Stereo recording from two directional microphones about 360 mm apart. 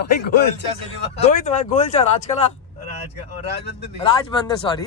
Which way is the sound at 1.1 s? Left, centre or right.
Centre.